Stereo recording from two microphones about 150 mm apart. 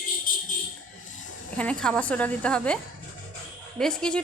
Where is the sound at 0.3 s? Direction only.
70° left (ahead or behind).